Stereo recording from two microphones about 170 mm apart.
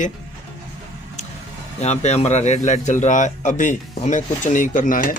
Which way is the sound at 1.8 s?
40° left (ahead or behind).